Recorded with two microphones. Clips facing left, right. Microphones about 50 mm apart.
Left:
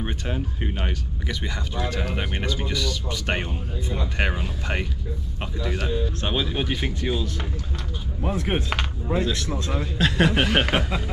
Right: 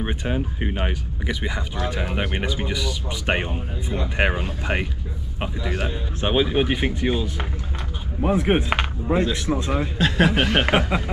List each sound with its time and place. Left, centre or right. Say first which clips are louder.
0.0 s speech: right 4 dB; centre
9.9 s a man's voice: even; centre
10.7 s speech: right 4 dB; centre